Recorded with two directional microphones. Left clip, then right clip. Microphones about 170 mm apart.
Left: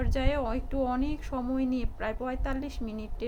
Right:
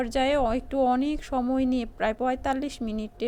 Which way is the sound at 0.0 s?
50° right (ahead or behind).